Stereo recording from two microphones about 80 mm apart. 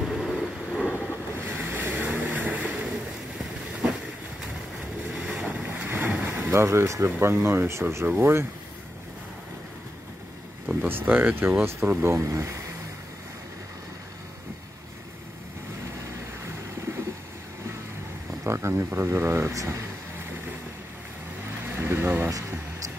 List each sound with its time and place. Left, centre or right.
0.0 s vehicle: centre
1.3 s ocean: right
2.0 s vehicle: right
5.1 s boat: centre; by 7.1 s right
7.2 s speech: right
10.8 s speech: right
18.4 s speech: right
21.5 s vehicle: right